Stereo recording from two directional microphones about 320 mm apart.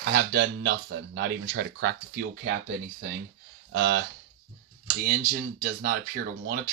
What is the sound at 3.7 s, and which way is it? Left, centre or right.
Speech, right.